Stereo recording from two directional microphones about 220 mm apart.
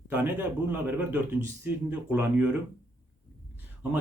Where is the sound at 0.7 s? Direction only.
5° right (ahead or behind).